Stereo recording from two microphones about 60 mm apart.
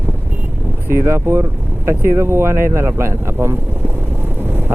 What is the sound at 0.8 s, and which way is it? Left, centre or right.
Speech, right.